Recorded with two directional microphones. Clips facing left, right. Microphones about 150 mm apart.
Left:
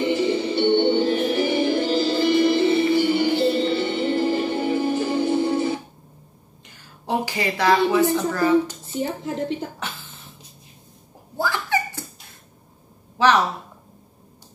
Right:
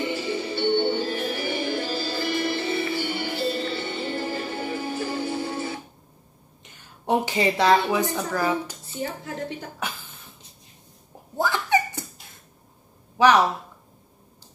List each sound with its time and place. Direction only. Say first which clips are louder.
0.1 s music: left 7 dB; 20° left (ahead or behind)
6.7 s a woman's voice: right 2 dB; 20° right (ahead or behind)
9.0 s a woman's voice: left 4 dB; 20° left (ahead or behind)
9.8 s a sound: right 1 dB; 10° right (ahead or behind)
11.3 s giggle: right 1 dB; 20° right (ahead or behind)
13.2 s speech: even; 15° right (ahead or behind)